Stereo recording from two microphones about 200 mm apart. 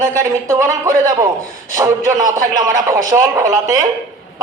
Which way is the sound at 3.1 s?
15° right (ahead or behind).